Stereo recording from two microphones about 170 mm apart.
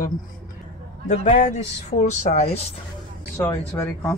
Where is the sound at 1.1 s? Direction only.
45° left (ahead or behind).